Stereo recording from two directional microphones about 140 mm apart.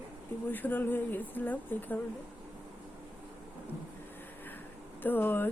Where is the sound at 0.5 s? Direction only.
15° left (ahead or behind).